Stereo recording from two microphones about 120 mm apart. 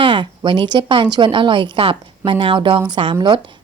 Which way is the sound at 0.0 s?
45° right (ahead or behind).